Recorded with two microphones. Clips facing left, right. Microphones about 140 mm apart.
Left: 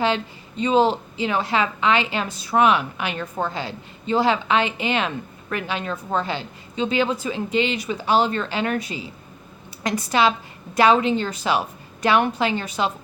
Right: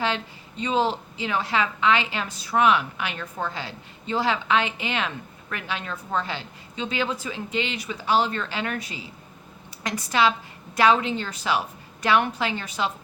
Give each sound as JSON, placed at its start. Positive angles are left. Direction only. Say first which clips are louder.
{"t": 0.6, "sound": "a woman's voice", "louder": "left 5 dB", "side_deg": 20}